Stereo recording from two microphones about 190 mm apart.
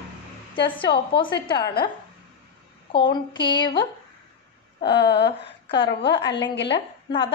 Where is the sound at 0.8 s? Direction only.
25° left (ahead or behind).